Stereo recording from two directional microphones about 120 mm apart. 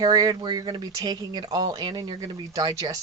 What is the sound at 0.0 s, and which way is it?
Speech, 35° right (ahead or behind).